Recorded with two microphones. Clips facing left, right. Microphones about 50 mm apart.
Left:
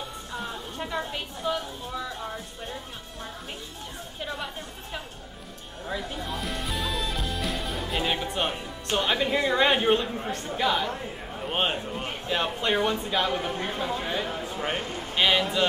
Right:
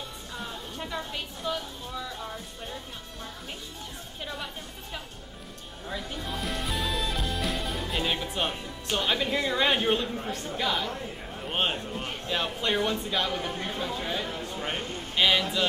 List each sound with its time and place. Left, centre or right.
0.3 s a woman's voice: centre
4.2 s speech: centre
5.9 s speech: centre
15.2 s speech: centre